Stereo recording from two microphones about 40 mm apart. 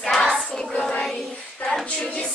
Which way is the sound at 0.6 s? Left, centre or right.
Centre.